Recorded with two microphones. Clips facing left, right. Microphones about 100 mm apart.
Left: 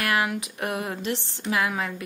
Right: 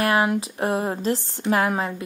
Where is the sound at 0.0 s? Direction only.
30° right (ahead or behind).